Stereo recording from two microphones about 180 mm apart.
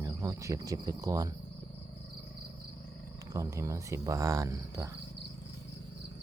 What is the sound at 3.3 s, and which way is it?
Speech, 15° right (ahead or behind).